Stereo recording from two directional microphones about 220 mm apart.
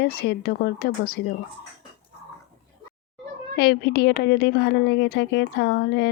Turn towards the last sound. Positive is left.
turn(degrees=50)  # may be behind; listen again after turning